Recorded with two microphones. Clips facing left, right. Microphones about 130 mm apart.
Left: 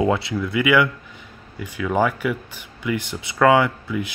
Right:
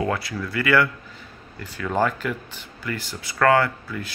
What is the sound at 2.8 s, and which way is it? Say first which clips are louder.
Speech: left 6 dB; 20° left (ahead or behind).